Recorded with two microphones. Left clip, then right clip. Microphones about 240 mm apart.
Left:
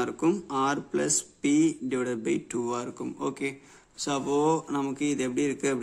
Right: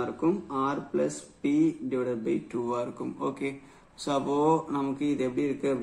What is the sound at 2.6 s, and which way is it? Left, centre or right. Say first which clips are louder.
A man's voice: right 1 dB; left.